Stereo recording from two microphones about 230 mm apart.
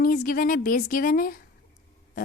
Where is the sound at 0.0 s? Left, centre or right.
Left.